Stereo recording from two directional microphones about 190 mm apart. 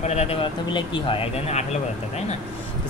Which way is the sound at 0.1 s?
30° left (ahead or behind).